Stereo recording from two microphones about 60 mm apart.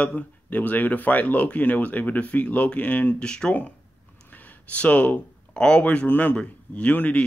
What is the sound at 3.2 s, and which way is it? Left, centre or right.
Speech, centre.